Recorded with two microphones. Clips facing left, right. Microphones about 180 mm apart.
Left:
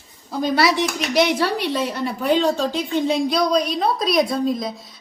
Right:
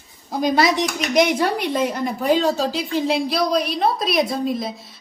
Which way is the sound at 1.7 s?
50° right (ahead or behind).